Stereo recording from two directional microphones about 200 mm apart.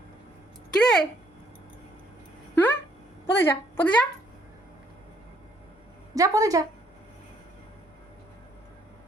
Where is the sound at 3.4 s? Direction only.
10° left (ahead or behind).